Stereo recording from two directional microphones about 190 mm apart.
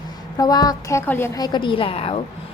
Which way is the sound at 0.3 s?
20° left (ahead or behind).